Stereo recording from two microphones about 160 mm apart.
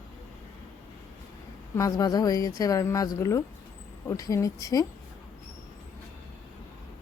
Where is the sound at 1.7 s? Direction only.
20° left (ahead or behind).